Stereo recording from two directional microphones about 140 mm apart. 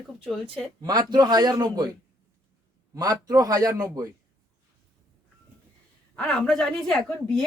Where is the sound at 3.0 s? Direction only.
25° right (ahead or behind).